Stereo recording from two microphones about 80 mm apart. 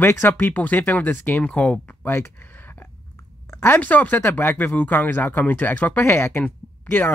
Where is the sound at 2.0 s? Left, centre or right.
Left.